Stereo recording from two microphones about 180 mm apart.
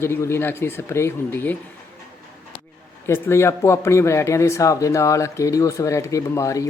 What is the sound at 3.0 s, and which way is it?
Speech, 15° left (ahead or behind).